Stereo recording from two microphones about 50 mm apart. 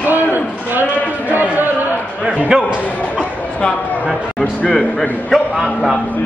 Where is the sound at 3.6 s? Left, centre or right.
Centre.